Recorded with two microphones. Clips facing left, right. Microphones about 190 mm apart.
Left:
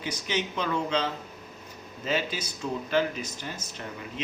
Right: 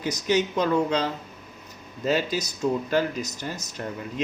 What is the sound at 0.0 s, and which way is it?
Speech, 40° right (ahead or behind).